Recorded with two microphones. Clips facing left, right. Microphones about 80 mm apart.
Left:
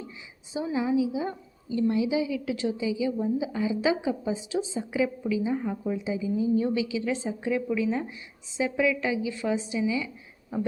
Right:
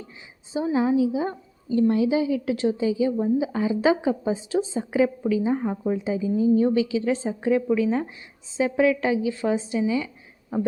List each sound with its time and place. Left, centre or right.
0.5 s a woman's voice: right